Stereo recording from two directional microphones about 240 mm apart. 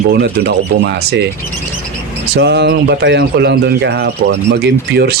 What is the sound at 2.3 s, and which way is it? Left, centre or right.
Speech, right.